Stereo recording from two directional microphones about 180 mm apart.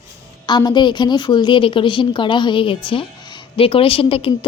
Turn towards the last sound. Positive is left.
turn(degrees=30)  # may be behind; listen again after turning